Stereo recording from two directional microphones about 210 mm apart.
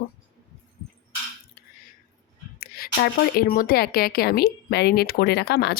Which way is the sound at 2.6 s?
45° left (ahead or behind).